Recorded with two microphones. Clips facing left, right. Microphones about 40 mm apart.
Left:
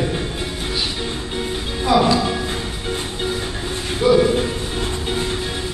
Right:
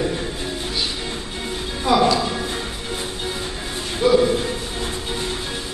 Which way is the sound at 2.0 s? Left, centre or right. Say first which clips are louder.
Left 1 dB; left.